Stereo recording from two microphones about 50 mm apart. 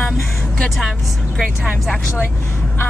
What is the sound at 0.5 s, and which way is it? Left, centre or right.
Speech, centre.